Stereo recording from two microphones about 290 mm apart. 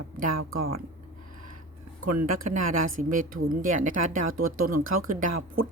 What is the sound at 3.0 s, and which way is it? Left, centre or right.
Speech, right.